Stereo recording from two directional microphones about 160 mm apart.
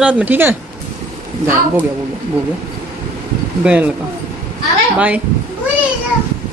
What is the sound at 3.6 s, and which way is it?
Speech, 10° right (ahead or behind).